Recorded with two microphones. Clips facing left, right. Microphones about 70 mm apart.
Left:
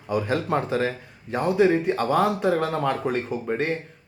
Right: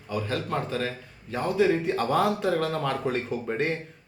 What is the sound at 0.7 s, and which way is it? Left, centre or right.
Speech, left.